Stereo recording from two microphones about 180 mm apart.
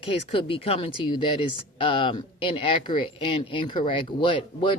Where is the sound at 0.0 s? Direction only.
30° left (ahead or behind).